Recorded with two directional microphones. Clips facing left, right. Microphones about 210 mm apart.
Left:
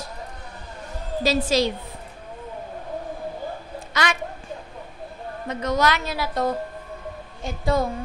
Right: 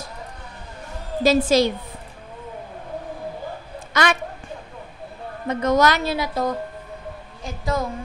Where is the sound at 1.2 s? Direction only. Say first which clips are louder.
Right 4 dB; 50° right (ahead or behind).